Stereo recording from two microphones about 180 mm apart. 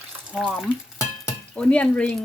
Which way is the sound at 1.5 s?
5° left (ahead or behind).